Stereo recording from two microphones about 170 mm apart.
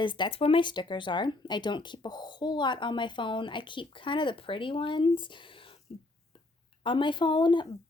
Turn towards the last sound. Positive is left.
turn(degrees=25)  # may be behind; listen again after turning